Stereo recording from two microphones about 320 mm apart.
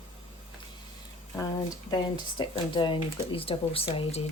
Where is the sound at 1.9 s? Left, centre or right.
Centre.